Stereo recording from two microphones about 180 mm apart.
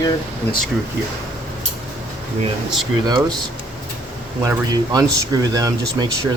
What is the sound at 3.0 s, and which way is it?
Speech, 20° right (ahead or behind).